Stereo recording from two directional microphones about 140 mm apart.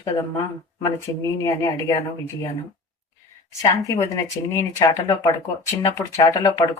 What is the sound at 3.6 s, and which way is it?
Speech, 25° left (ahead or behind).